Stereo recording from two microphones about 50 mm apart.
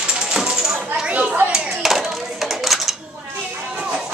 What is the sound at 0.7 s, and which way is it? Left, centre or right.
Speech, right.